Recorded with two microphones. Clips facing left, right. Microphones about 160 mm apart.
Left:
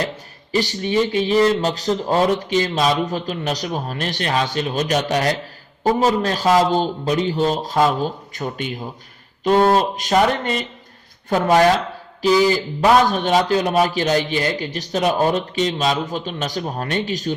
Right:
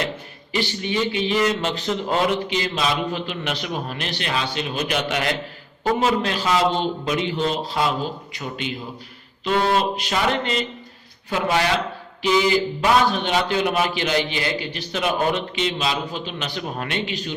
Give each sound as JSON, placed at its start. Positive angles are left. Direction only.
{"t": 0.5, "sound": "a man's voice", "side_deg": 40}
{"t": 8.3, "sound": "a sound", "side_deg": 50}
{"t": 12.2, "sound": "a man's voice", "side_deg": 40}